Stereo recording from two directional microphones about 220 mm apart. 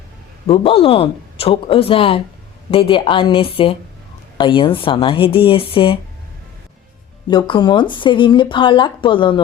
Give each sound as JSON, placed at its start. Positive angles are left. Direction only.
{"t": 0.4, "sound": "speech", "side_deg": 25}
{"t": 7.3, "sound": "speech", "side_deg": 20}